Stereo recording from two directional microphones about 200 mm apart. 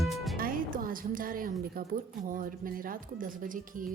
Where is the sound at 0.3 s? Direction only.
45° right (ahead or behind).